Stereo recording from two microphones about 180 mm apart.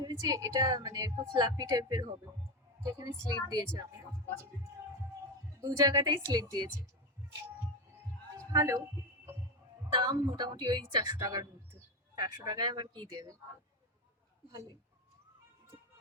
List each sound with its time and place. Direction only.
0.0 s a woman's voice: 20° right (ahead or behind)
5.5 s a woman's voice: 20° right (ahead or behind)
8.5 s a woman's voice: 15° right (ahead or behind)
9.9 s a woman's voice: 25° right (ahead or behind)